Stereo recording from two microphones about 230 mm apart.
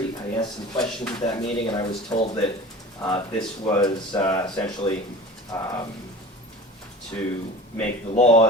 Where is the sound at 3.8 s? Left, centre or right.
Centre.